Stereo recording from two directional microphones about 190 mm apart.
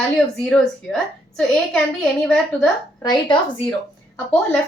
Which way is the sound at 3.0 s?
20° left (ahead or behind).